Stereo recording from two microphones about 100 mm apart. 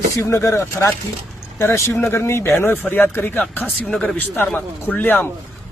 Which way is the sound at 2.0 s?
25° left (ahead or behind).